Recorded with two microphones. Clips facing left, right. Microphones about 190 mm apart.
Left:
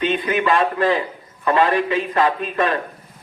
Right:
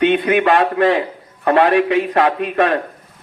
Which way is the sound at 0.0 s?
65° right (ahead or behind).